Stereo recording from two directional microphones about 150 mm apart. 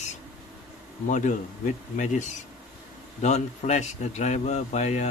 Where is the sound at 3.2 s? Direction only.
50° left (ahead or behind).